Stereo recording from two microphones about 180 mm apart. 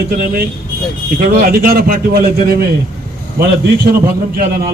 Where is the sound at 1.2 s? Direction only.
55° right (ahead or behind).